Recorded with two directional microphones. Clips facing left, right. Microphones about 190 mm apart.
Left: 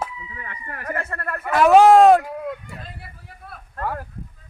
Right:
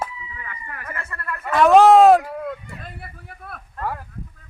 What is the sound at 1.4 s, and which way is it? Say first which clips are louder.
Speech: even; 5° left (ahead or behind).